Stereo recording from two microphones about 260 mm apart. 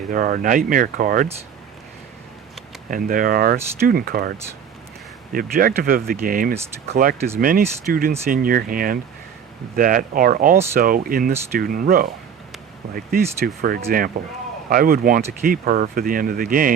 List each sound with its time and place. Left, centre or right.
0.1 s speech: right
2.9 s speech: right